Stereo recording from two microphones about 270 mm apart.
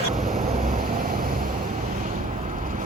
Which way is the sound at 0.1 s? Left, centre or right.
Right.